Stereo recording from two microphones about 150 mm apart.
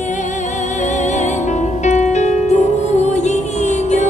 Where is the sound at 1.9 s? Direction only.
50° left (ahead or behind).